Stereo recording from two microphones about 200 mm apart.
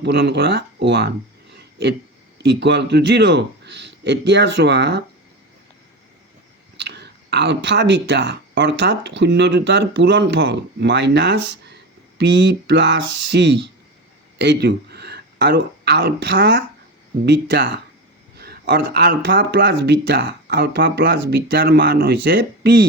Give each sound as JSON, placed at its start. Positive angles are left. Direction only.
{"t": 0.0, "sound": "a man's voice", "side_deg": -60}
{"t": 1.5, "sound": "a sound", "side_deg": -55}
{"t": 2.4, "sound": "a man's voice", "side_deg": -55}
{"t": 6.7, "sound": "a man's voice", "side_deg": -55}